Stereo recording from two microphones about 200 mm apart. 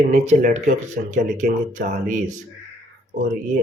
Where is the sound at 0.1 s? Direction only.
35° right (ahead or behind).